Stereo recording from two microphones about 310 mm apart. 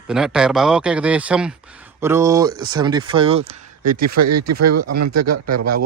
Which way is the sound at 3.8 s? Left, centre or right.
Right.